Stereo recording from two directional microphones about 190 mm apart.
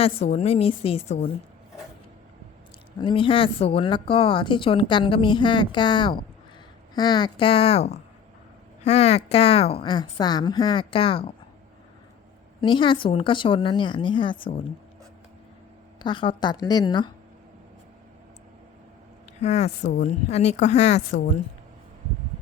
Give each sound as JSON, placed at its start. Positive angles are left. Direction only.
{"t": 0.0, "sound": "a woman's voice", "side_deg": 35}
{"t": 3.0, "sound": "speech", "side_deg": 25}
{"t": 12.5, "sound": "speech", "side_deg": 25}
{"t": 16.0, "sound": "speech", "side_deg": 25}
{"t": 19.4, "sound": "a woman's voice", "side_deg": 35}